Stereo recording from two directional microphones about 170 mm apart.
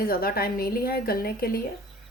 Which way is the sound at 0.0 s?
60° left (ahead or behind).